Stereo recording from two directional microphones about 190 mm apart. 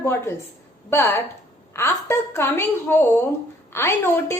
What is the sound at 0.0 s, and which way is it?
A woman's voice, 15° left (ahead or behind).